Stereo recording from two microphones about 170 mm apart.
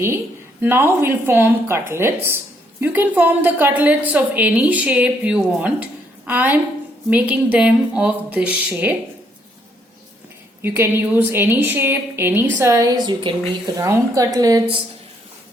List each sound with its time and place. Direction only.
0.6 s a woman's voice: 10° right (ahead or behind)
10.6 s a woman's voice: 15° right (ahead or behind)